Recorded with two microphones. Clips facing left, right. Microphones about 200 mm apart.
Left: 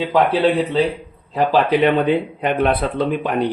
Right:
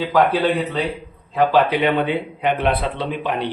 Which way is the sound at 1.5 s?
40° left (ahead or behind).